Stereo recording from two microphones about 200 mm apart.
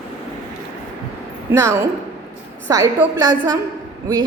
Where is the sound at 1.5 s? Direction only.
15° right (ahead or behind).